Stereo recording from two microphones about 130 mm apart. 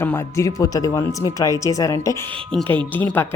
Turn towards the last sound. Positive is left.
turn(degrees=15)  # may be behind; listen again after turning